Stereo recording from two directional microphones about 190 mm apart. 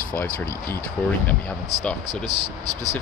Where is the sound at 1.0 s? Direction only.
10° left (ahead or behind).